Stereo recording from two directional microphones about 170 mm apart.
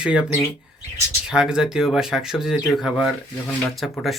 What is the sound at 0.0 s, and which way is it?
Speech, 5° right (ahead or behind).